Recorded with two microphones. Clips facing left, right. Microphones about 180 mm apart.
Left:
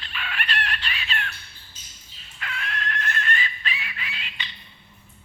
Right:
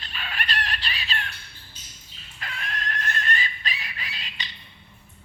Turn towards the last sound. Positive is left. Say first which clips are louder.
# left 1 dB
turn(degrees=-35)  # may be behind; listen again after turning